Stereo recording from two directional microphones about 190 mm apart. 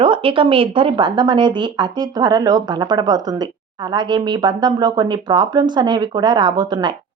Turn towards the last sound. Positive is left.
turn(degrees=-25)  # may be behind; listen again after turning